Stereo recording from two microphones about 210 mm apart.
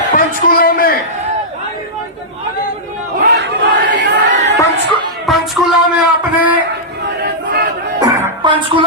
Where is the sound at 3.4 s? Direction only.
60° right (ahead or behind).